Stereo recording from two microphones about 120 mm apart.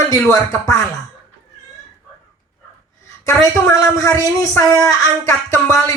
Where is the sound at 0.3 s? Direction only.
25° left (ahead or behind).